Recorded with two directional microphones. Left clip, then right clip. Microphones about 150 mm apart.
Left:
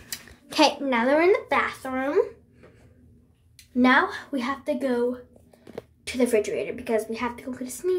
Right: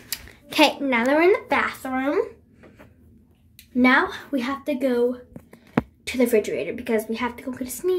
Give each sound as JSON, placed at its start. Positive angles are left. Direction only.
{"t": 0.1, "sound": "speech", "side_deg": -10}
{"t": 3.7, "sound": "a woman's voice", "side_deg": -10}